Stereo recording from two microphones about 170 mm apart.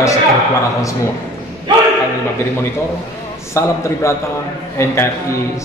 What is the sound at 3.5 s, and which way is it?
Speech, 15° left (ahead or behind).